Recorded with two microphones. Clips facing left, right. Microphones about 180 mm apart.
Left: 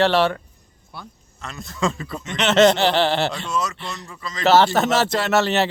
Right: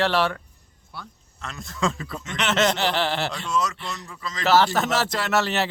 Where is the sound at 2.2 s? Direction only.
20° left (ahead or behind).